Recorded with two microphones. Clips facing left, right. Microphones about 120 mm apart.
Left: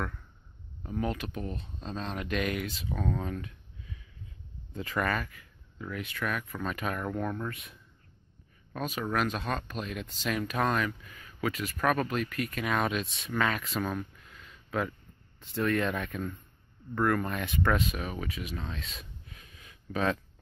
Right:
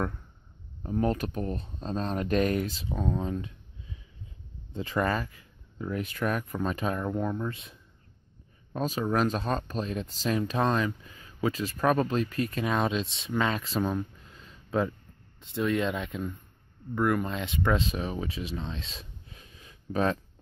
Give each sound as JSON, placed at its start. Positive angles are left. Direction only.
{"t": 0.8, "sound": "speech", "side_deg": -35}
{"t": 8.7, "sound": "speech", "side_deg": -30}